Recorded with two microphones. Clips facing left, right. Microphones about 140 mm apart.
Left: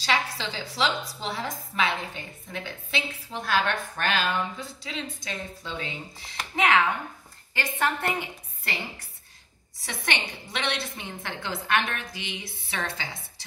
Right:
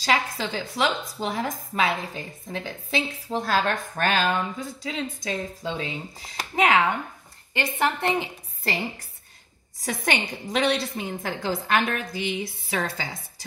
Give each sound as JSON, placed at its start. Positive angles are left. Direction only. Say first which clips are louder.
{"t": 0.0, "sound": "a woman's voice", "louder": "right 3 dB", "side_deg": -45}
{"t": 7.5, "sound": "a woman's voice", "louder": "right 3 dB", "side_deg": -20}
{"t": 9.8, "sound": "a woman's voice", "louder": "right 5 dB", "side_deg": -45}